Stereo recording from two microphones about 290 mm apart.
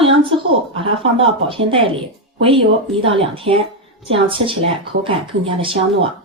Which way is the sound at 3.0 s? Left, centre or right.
Centre.